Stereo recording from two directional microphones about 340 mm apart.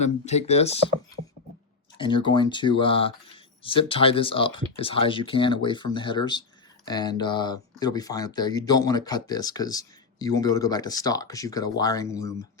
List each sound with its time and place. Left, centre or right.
0.0 s speech: centre
2.0 s speech: centre